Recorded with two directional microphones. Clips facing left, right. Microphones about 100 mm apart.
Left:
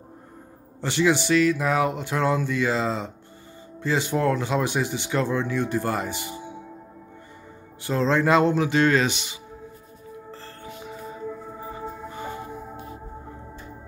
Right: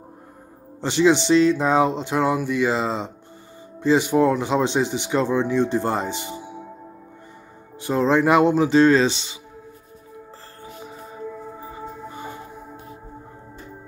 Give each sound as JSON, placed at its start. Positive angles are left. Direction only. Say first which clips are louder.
{"t": 0.7, "sound": "speech", "louder": "right 4 dB", "side_deg": -20}
{"t": 7.8, "sound": "music", "louder": "right 3 dB", "side_deg": -15}
{"t": 8.6, "sound": "speech", "louder": "right 5 dB", "side_deg": -25}